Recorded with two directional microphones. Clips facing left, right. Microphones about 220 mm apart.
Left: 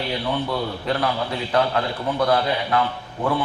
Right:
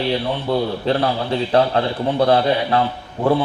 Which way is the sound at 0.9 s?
30° right (ahead or behind).